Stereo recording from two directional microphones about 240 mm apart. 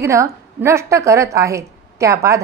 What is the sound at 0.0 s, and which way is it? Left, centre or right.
A woman's voice, centre.